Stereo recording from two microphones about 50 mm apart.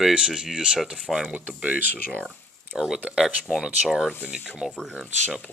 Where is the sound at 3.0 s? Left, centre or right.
Centre.